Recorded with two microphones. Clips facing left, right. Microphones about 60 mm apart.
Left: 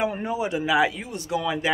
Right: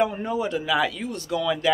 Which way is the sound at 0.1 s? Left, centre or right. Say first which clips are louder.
Even; centre.